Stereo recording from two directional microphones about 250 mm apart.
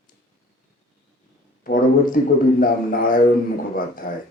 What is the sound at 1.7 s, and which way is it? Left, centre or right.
Speech, left.